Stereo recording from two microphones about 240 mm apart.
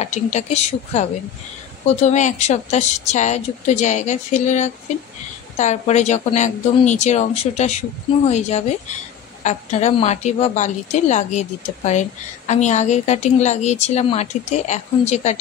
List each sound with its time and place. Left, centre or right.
0.0 s a woman's voice: left